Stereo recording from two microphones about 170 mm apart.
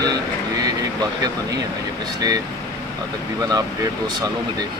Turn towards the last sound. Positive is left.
turn(degrees=-20)  # may be behind; listen again after turning